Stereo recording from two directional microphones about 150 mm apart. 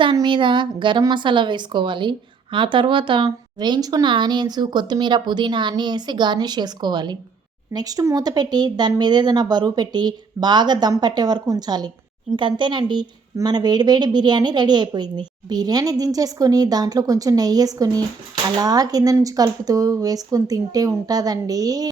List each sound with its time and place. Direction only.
0.0 s a woman's voice: 30° right (ahead or behind)